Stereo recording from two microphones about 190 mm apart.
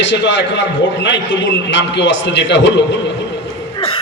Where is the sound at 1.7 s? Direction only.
75° left (ahead or behind).